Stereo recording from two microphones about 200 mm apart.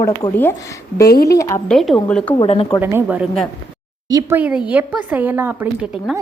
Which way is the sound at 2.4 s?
30° left (ahead or behind).